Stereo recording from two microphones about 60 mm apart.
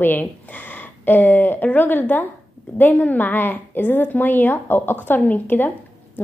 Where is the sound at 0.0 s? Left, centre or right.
Left.